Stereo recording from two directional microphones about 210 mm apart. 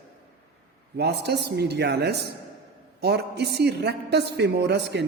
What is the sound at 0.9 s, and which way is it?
A man's voice, 50° right (ahead or behind).